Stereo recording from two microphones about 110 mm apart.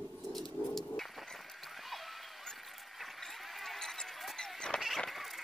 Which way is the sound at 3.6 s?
Centre (ahead or behind).